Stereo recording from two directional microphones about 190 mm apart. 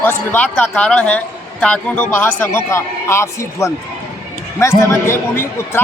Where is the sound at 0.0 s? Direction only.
10° left (ahead or behind).